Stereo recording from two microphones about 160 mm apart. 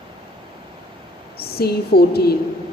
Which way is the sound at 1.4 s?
80° left.